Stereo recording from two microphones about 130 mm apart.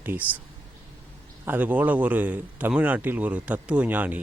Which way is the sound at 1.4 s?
15° right (ahead or behind).